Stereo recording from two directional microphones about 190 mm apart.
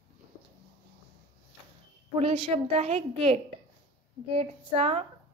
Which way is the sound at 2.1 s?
30° right (ahead or behind).